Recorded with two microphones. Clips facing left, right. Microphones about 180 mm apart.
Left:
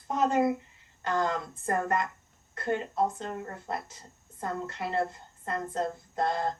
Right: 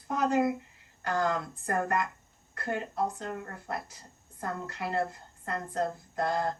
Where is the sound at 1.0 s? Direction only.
25° left (ahead or behind).